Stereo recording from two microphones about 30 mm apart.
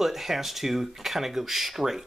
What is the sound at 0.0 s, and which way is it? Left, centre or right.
Speech, centre.